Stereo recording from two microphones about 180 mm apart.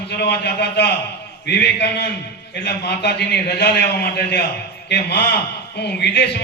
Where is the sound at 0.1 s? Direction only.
65° left (ahead or behind).